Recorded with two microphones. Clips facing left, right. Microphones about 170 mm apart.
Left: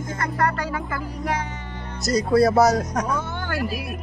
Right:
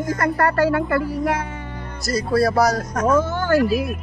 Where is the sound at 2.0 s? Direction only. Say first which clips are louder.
Left 1 dB; 20° left (ahead or behind).